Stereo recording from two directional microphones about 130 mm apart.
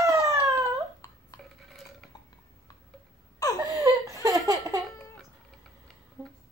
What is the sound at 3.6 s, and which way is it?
Laughter, 25° right (ahead or behind).